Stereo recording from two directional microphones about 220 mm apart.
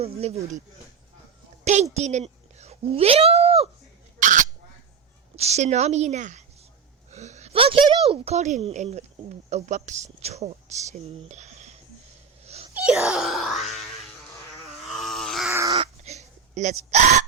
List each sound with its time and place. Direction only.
0.0 s a woman's voice: 30° right (ahead or behind)
1.6 s speech: 30° right (ahead or behind)
4.2 s bird: 35° right (ahead or behind)
5.4 s a woman's voice: 30° right (ahead or behind)
12.5 s wail: 30° right (ahead or behind)
12.7 s wail: 5° right (ahead or behind)
14.8 s grunt: centre (ahead or behind)
15.5 s dog: 15° right (ahead or behind)
15.8 s hiccup: 30° right (ahead or behind)